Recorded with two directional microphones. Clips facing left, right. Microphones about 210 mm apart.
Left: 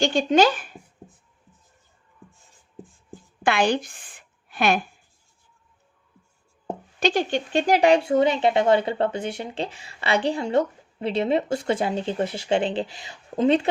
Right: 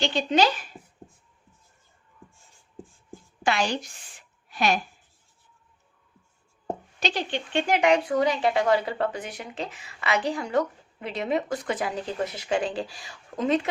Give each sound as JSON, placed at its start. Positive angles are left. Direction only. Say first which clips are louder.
{"t": 0.0, "sound": "speech", "louder": "left 4 dB", "side_deg": 45}
{"t": 3.4, "sound": "a woman's voice", "louder": "left 4 dB", "side_deg": 55}
{"t": 4.4, "sound": "a sound", "louder": "left 3 dB", "side_deg": 55}
{"t": 7.0, "sound": "speech", "louder": "left 8 dB", "side_deg": 45}